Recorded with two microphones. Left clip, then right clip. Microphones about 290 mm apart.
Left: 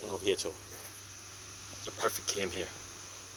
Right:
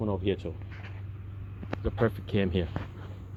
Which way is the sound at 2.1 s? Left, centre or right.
Centre.